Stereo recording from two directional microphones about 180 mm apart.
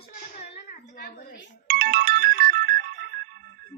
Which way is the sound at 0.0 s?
40° left (ahead or behind).